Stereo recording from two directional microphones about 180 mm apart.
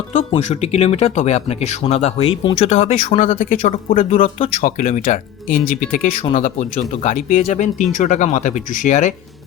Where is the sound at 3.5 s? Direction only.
45° left (ahead or behind).